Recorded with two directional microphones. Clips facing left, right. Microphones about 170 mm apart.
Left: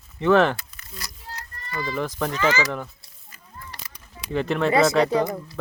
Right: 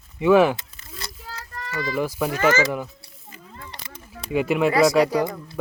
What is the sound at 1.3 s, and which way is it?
Child singing, 90° right.